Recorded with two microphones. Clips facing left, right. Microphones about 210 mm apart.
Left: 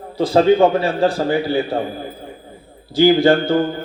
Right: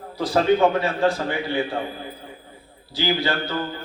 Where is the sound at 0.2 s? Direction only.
30° left (ahead or behind).